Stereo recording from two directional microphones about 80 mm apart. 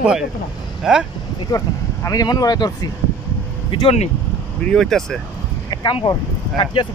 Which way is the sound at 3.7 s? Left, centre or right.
Left.